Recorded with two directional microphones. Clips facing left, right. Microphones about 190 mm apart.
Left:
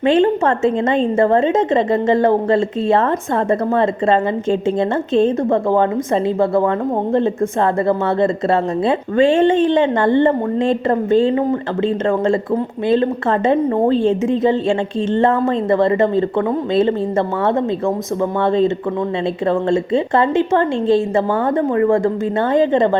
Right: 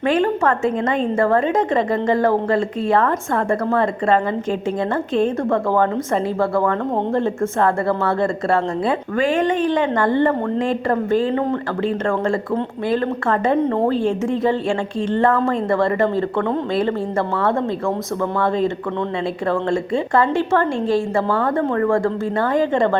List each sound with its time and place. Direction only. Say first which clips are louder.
0.0 s a woman's voice: left 4 dB; 25° left (ahead or behind)
7.1 s a woman's voice: left 3 dB; 20° left (ahead or behind)
13.5 s a woman's voice: left 3 dB; 15° left (ahead or behind)
19.5 s a woman's voice: left 4 dB; 25° left (ahead or behind)